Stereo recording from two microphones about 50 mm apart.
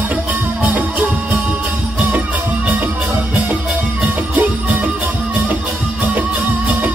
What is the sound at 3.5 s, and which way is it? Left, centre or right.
Music, right.